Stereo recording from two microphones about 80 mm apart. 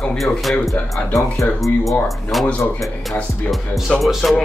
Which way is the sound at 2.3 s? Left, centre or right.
Centre.